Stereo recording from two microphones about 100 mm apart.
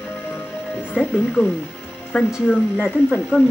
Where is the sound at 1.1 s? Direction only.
10° left (ahead or behind).